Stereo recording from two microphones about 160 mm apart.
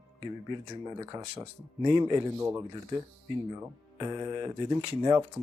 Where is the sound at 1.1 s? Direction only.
30° right (ahead or behind).